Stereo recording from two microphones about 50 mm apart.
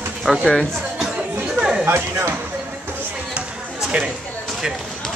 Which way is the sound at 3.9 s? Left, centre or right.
Right.